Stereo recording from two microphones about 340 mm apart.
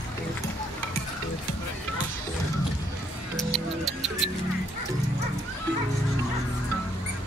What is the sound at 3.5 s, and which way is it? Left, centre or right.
Music, centre.